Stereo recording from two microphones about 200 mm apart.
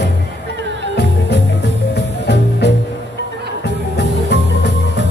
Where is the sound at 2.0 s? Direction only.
60° left (ahead or behind).